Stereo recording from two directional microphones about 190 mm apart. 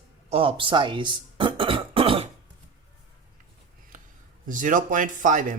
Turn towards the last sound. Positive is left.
turn(degrees=-40)  # may be behind; listen again after turning